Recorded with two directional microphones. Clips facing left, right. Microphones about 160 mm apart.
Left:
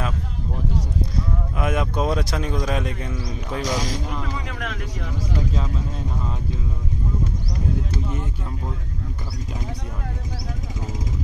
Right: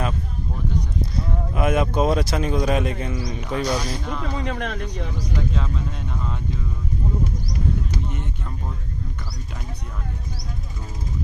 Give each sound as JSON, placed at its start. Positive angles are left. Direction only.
{"t": 1.5, "sound": "a man's voice", "side_deg": -5}
{"t": 3.6, "sound": "speech", "side_deg": 90}
{"t": 4.4, "sound": "speech", "side_deg": -35}